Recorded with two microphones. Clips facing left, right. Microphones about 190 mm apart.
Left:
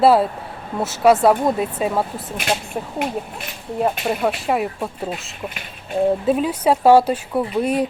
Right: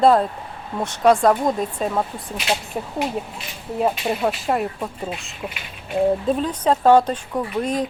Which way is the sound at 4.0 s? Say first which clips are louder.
Left 1 dB; centre (ahead or behind).